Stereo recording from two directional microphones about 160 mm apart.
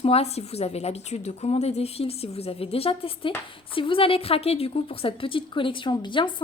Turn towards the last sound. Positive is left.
turn(degrees=30)  # may be behind; listen again after turning